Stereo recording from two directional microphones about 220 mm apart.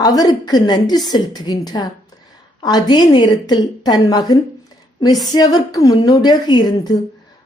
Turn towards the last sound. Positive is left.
turn(degrees=20)  # may be behind; listen again after turning